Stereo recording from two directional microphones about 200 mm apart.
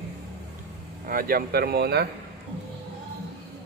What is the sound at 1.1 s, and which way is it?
Speech, 45° right (ahead or behind).